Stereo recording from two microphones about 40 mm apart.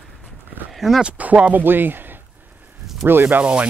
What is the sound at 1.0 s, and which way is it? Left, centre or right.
Speech, right.